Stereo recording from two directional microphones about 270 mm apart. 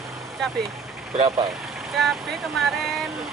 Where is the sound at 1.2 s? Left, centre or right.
Right.